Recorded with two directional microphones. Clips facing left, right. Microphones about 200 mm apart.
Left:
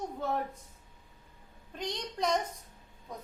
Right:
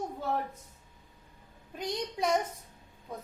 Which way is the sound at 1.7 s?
10° right (ahead or behind).